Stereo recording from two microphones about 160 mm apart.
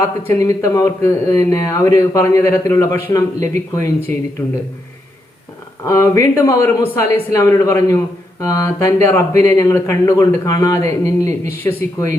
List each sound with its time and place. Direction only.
0.3 s speech: 20° left (ahead or behind)
5.8 s speech: 20° left (ahead or behind)